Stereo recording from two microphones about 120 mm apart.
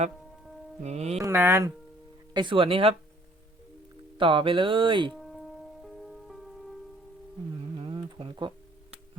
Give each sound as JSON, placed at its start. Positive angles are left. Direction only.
{"t": 0.8, "sound": "music", "side_deg": -65}
{"t": 1.2, "sound": "speech", "side_deg": -20}
{"t": 2.3, "sound": "speech", "side_deg": -40}
{"t": 4.2, "sound": "speech", "side_deg": -45}
{"t": 5.1, "sound": "music", "side_deg": 0}
{"t": 7.6, "sound": "a sound", "side_deg": -45}